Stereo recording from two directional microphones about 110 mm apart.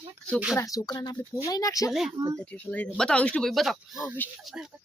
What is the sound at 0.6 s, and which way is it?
Speech, 35° left (ahead or behind).